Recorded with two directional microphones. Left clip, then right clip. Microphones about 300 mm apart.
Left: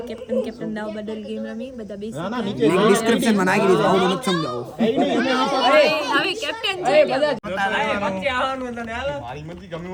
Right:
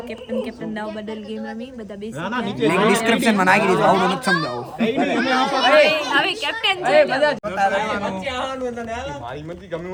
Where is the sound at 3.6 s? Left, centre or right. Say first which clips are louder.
Even; right.